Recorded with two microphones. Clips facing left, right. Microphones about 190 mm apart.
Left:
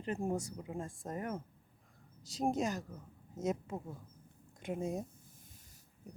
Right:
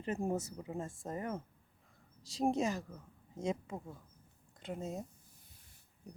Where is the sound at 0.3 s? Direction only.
5° right (ahead or behind).